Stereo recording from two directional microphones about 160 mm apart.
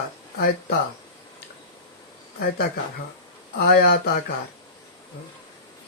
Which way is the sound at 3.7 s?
75° left (ahead or behind).